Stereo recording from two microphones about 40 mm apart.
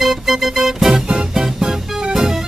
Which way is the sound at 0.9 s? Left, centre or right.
Right.